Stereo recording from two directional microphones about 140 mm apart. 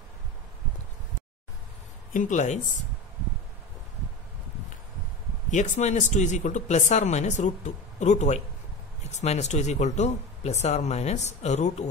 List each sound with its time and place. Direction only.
2.1 s speech: 60° left (ahead or behind)
5.5 s speech: 60° left (ahead or behind)